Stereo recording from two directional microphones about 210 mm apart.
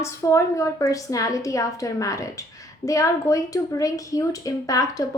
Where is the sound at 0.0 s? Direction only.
15° left (ahead or behind).